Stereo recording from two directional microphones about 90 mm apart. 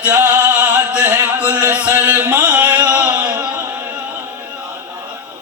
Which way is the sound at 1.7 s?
15° right (ahead or behind).